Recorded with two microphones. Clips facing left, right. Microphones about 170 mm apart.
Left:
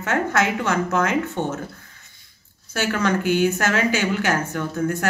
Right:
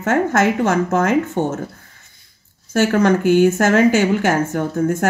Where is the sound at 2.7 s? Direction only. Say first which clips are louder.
Right 7 dB; 50° right (ahead or behind).